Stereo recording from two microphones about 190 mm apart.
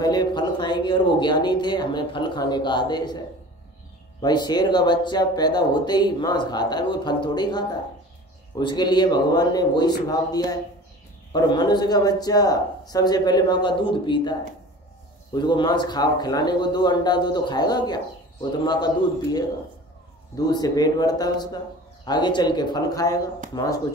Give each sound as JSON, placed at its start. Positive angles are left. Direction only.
{"t": 0.0, "sound": "speech", "side_deg": 20}
{"t": 4.2, "sound": "speech", "side_deg": 20}
{"t": 15.3, "sound": "speech", "side_deg": 20}
{"t": 20.3, "sound": "speech", "side_deg": 20}